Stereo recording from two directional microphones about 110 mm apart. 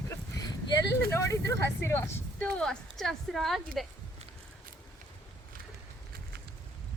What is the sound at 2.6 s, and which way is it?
A woman's voice, 5° left (ahead or behind).